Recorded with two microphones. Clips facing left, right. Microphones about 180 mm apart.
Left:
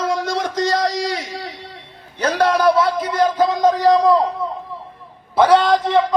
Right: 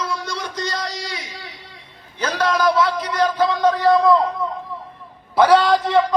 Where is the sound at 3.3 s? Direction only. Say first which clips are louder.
Left 2 dB; 45° left (ahead or behind).